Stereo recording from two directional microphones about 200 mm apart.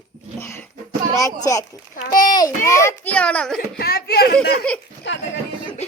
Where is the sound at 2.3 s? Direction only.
20° left (ahead or behind).